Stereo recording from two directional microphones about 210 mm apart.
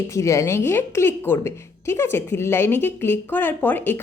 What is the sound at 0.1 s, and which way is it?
A woman's voice, 15° left (ahead or behind).